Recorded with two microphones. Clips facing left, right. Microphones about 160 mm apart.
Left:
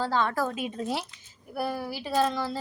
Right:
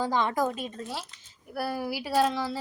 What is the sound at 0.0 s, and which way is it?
Speech, 15° right (ahead or behind).